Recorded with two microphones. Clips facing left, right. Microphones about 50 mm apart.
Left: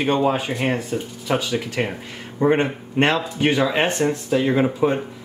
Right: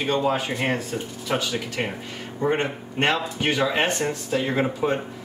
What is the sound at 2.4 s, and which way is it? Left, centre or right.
Speech, centre.